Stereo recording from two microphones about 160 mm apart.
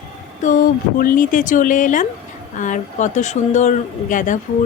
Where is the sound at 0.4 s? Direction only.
60° left (ahead or behind).